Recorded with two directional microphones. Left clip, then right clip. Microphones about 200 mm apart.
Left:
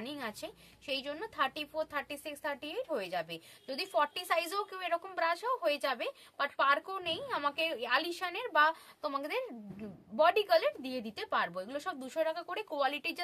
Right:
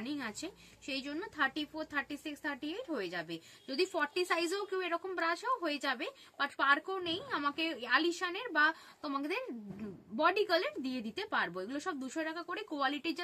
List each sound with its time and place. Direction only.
0.0 s a woman's voice: 50° left (ahead or behind)